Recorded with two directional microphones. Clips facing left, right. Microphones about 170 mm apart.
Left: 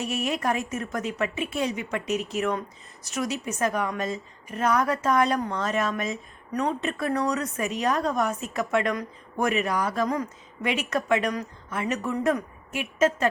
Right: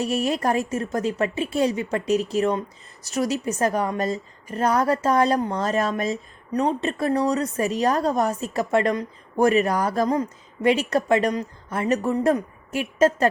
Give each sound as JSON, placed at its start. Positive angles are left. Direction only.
{"t": 0.0, "sound": "a woman's voice", "side_deg": -35}
{"t": 10.1, "sound": "a woman's voice", "side_deg": -30}